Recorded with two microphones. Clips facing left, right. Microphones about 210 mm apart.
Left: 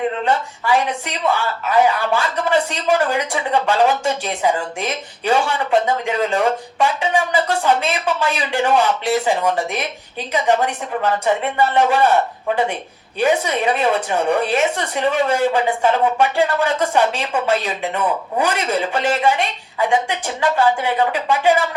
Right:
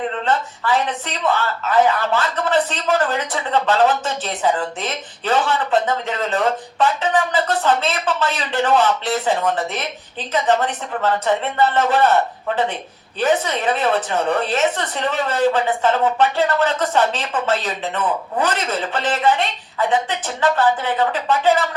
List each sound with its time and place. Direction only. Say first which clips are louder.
0.3 s speech: right 1 dB; 10° left (ahead or behind)
13.1 s speech: left 1 dB; 10° left (ahead or behind)